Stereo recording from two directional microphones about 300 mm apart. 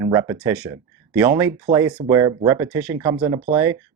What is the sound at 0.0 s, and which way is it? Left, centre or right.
Speech, centre.